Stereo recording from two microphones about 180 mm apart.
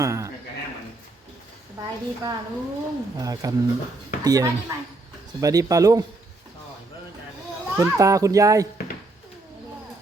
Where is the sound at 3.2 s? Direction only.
20° right (ahead or behind).